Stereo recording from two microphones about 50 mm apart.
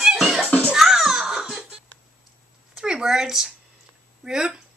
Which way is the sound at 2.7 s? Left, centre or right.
Centre.